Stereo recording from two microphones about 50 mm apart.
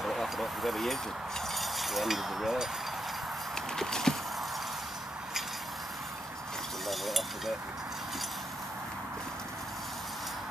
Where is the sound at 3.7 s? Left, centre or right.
Centre.